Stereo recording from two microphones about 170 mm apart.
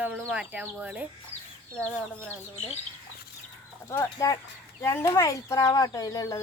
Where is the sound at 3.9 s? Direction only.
15° left (ahead or behind).